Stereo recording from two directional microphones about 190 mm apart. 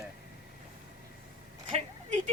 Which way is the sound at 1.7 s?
40° right (ahead or behind).